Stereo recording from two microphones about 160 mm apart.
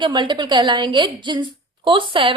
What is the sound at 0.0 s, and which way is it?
Speech, 30° right (ahead or behind).